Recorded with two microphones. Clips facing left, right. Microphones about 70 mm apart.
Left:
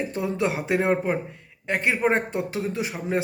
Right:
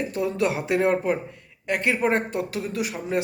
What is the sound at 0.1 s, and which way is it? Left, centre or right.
Speech, left.